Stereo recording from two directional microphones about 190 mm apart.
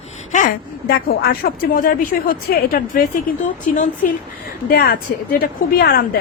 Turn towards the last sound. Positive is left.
turn(degrees=55)  # may be behind; listen again after turning